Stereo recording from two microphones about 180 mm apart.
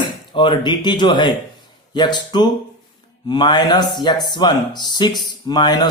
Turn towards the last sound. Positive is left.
turn(degrees=25)  # may be behind; listen again after turning